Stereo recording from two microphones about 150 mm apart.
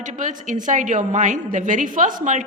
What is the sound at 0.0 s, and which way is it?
A woman's voice, 55° right (ahead or behind).